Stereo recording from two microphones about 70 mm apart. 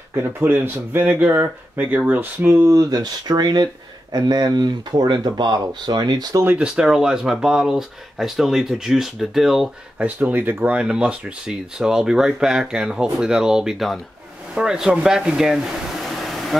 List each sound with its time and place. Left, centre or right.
0.1 s speech: right
2.7 s speech: right
6.6 s speech: centre
9.9 s speech: right
10.7 s speech: centre